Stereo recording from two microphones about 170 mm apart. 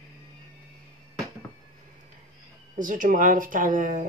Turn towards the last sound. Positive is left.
turn(degrees=-50)  # may be behind; listen again after turning